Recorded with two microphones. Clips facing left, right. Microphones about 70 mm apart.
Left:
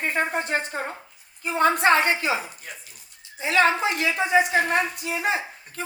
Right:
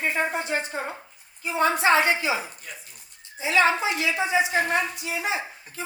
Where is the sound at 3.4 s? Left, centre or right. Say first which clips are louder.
Left 1 dB; left.